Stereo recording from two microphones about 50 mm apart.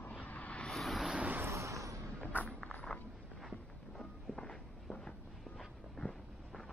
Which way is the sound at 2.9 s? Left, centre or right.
Left.